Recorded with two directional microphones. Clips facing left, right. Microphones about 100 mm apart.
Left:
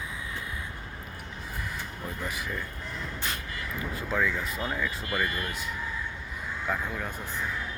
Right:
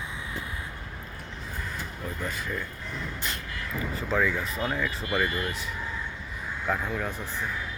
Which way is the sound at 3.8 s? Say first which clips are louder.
Right 3 dB; 5° left (ahead or behind).